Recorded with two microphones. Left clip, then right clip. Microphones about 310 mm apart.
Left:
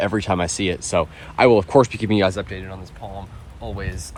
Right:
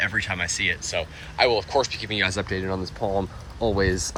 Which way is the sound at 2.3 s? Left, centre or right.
Centre.